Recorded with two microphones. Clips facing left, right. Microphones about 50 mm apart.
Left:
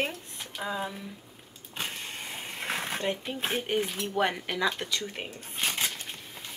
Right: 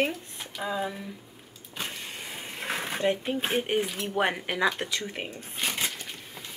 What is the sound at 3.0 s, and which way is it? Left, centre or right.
Speech, centre.